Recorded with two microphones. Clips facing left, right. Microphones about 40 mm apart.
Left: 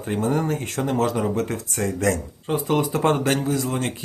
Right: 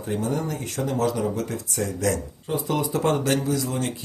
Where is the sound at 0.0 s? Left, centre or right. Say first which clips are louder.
Left 3 dB; left.